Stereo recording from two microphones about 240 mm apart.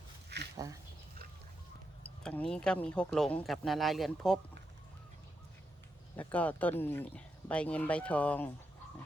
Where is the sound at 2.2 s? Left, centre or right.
Centre.